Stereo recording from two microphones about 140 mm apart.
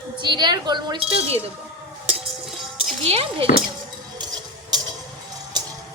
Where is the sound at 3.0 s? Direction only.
45° right (ahead or behind).